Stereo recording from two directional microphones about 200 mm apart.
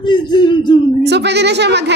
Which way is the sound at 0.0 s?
20° left (ahead or behind).